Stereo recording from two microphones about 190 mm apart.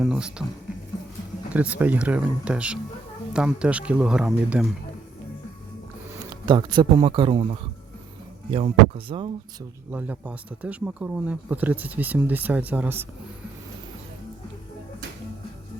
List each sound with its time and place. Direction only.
0.0 s speech: 5° right (ahead or behind)
1.5 s speech: 10° right (ahead or behind)
6.4 s a man's voice: 25° right (ahead or behind)
9.9 s speech: 10° right (ahead or behind)